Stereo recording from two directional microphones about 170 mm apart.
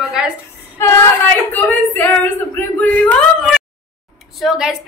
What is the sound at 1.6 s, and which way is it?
A woman's voice, 10° left (ahead or behind).